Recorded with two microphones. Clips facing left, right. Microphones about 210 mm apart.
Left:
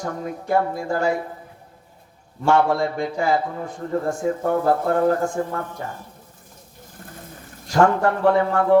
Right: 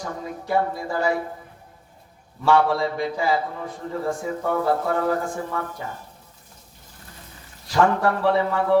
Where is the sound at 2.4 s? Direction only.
45° left (ahead or behind).